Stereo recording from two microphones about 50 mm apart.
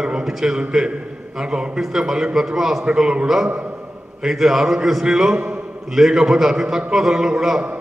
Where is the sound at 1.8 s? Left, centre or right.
Centre.